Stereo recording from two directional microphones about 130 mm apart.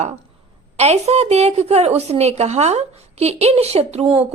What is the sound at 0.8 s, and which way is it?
A woman's voice, 55° right (ahead or behind).